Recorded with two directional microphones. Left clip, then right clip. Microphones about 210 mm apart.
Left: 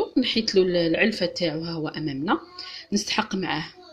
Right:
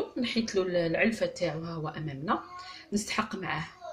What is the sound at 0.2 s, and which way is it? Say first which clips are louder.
A woman's voice: left 9 dB; 45° left (ahead or behind).